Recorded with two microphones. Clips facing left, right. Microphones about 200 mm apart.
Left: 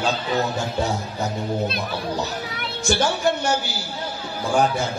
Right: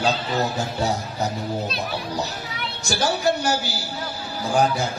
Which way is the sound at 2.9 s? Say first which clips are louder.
Left 1 dB; 35° right (ahead or behind).